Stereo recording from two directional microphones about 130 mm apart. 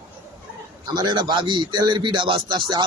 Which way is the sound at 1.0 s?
35° right (ahead or behind).